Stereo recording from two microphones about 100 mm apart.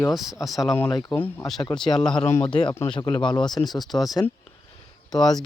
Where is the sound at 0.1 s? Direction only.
Centre (ahead or behind).